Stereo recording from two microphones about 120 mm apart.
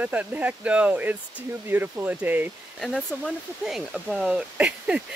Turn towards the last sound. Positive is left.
turn(degrees=-10)  # may be behind; listen again after turning